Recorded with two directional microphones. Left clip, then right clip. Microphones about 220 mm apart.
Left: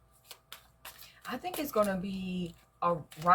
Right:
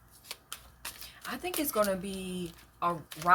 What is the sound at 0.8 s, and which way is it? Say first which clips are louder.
Speech: right 3 dB; 15° right (ahead or behind).